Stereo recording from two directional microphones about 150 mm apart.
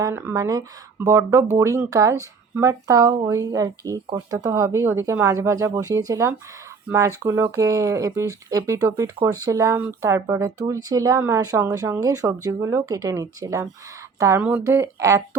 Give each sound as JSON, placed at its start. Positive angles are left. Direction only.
{"t": 0.0, "sound": "speech", "side_deg": -15}